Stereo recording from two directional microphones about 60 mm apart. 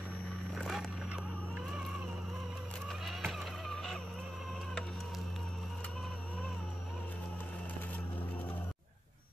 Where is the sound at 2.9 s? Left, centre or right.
Centre.